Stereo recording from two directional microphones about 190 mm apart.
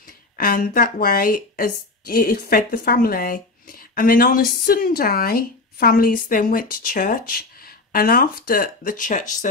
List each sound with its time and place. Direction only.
0.4 s a woman's voice: 50° left (ahead or behind)